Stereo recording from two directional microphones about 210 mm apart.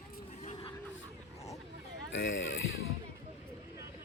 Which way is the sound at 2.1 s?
60° left (ahead or behind).